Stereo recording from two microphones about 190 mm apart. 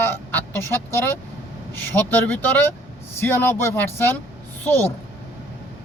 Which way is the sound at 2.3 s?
10° left (ahead or behind).